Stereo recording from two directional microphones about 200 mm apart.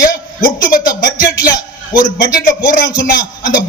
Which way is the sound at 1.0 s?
40° left (ahead or behind).